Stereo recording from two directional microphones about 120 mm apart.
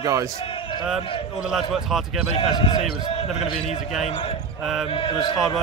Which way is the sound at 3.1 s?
55° left (ahead or behind).